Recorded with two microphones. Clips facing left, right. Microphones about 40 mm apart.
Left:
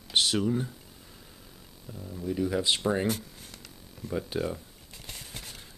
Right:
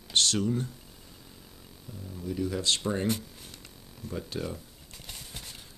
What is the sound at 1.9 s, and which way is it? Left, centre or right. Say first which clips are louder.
Speech: left 3 dB; centre.